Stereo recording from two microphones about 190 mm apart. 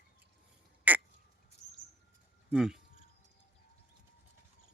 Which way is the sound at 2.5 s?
5° right (ahead or behind).